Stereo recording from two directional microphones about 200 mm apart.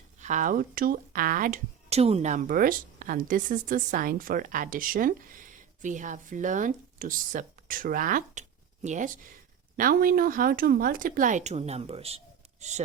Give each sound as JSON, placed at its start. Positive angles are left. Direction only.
{"t": 0.2, "sound": "speech", "side_deg": -40}